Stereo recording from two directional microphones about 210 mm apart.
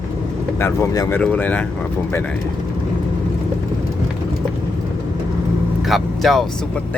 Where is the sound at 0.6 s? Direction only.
15° left (ahead or behind).